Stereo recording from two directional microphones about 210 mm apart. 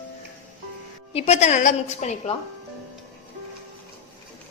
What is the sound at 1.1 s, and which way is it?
A woman's voice, 30° left (ahead or behind).